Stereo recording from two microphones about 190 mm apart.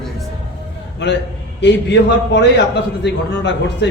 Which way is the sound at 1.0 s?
65° left (ahead or behind).